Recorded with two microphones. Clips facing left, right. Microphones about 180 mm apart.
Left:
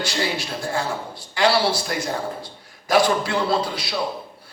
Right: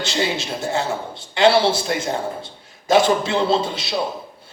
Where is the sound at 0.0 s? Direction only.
25° right (ahead or behind).